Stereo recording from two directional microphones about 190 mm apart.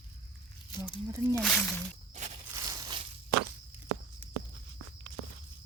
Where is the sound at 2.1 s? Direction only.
40° right (ahead or behind).